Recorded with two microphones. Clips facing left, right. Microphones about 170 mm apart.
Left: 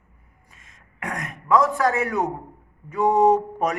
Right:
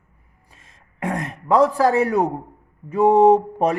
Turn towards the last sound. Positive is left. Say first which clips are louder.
# right 4 dB
turn(degrees=-30)  # may be behind; listen again after turning